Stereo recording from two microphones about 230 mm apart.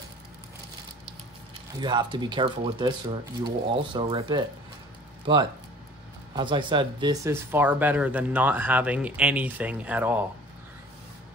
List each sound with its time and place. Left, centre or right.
1.8 s speech: centre